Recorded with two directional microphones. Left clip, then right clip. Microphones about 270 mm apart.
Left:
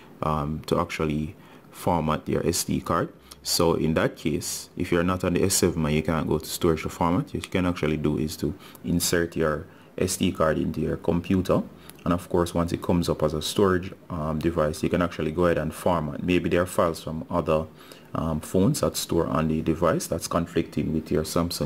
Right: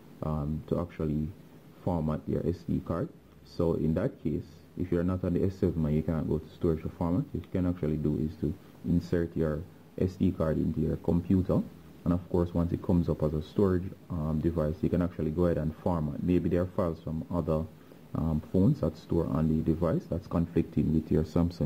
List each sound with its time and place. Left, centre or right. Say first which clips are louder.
0.2 s speech: left 9 dB; centre
8.9 s speech: left 6 dB; centre
14.8 s speech: left 6 dB; centre
17.1 s speech: left 7 dB; centre